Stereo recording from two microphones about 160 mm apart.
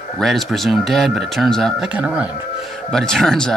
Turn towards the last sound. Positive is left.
turn(degrees=0)  # may be behind; listen again after turning